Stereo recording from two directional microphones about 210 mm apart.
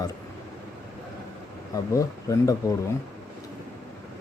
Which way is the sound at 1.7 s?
15° left (ahead or behind).